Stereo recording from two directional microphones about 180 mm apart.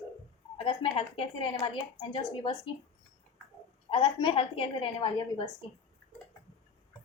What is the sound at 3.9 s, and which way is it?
Speech, 30° left (ahead or behind).